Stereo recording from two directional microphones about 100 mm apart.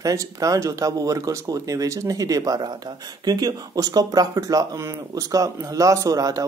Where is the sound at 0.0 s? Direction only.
35° right (ahead or behind).